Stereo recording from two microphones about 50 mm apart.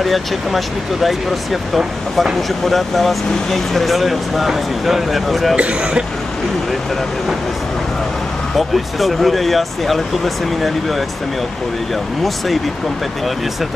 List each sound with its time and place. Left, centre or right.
0.0 s speech: centre
5.6 s speech: right
8.5 s speech: centre